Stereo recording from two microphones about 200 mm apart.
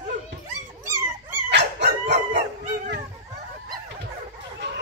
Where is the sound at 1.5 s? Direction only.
60° right (ahead or behind).